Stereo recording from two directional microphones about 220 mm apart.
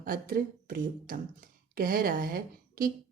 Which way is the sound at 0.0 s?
40° right (ahead or behind).